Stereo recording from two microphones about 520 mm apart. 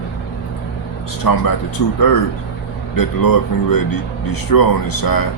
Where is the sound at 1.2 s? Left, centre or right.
Left.